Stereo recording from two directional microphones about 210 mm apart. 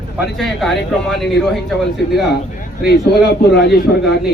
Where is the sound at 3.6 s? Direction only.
55° left (ahead or behind).